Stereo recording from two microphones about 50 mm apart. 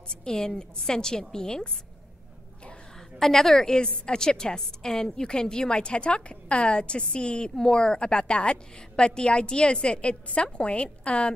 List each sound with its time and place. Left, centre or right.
0.2 s a woman's voice: centre
3.2 s a woman's voice: centre; by 11.3 s left